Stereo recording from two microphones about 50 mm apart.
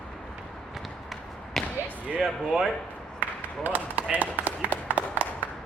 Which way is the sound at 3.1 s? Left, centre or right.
Right.